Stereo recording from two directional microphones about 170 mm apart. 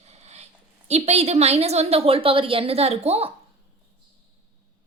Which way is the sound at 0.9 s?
40° right (ahead or behind).